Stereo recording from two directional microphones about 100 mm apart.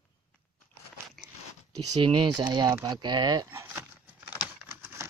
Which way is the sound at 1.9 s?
60° right (ahead or behind).